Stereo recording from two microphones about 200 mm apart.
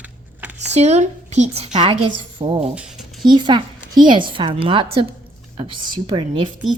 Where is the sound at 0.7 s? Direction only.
35° right (ahead or behind).